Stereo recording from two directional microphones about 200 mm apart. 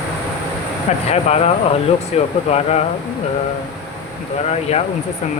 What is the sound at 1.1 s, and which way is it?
Speech, 30° left (ahead or behind).